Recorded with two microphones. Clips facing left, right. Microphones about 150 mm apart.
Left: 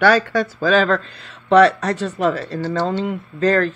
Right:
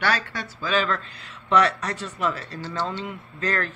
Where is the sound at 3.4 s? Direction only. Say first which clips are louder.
Left 11 dB; 30° left (ahead or behind).